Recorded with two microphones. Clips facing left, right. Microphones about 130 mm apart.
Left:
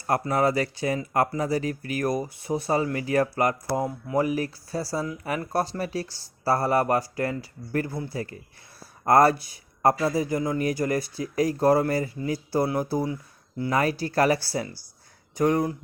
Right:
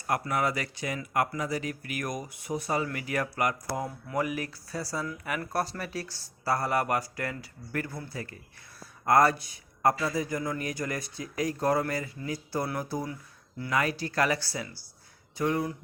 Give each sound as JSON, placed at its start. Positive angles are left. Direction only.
{"t": 0.1, "sound": "speech", "side_deg": 30}